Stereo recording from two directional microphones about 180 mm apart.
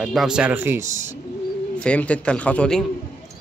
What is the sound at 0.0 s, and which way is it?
Speech, centre (ahead or behind).